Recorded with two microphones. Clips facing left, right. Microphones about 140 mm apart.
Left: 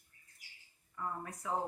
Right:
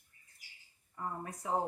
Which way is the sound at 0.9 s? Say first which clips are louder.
Right 1 dB; 30° right (ahead or behind).